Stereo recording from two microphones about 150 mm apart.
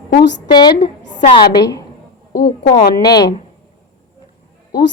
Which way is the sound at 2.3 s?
90° left.